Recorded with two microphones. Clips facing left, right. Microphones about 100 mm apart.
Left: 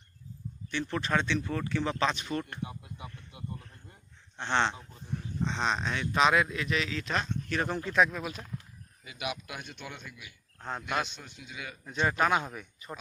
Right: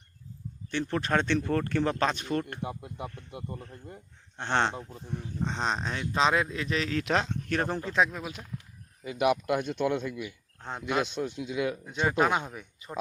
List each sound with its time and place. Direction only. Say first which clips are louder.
0.7 s speech: right 2 dB; 45° right (ahead or behind)
6.9 s speech: right 5 dB; 75° right (ahead or behind)
7.7 s speech: left 2 dB; 35° right (ahead or behind)
8.2 s speech: left 1 dB; 20° right (ahead or behind)
9.0 s speech: right 11 dB; 45° right (ahead or behind)
9.6 s a man's voice: right 15 dB; 90° right
10.7 s speech: right 3 dB; 15° right (ahead or behind)
11.2 s a man's voice: right 14 dB; 90° right
11.9 s speech: left 1 dB; 20° right (ahead or behind)